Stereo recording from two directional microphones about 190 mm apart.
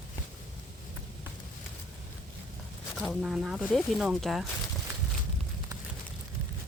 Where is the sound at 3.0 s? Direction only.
Centre (ahead or behind).